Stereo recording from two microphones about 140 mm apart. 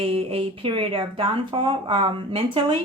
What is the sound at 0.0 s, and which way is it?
Speech, 45° right (ahead or behind).